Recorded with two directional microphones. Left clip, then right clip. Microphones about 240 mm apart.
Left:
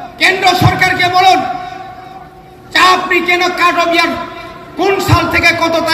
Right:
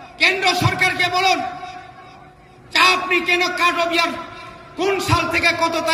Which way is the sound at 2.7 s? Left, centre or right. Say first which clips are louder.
Left 6 dB; centre.